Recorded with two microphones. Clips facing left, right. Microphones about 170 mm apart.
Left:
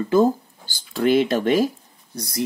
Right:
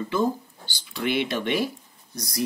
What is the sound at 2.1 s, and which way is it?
Speech, 25° left (ahead or behind).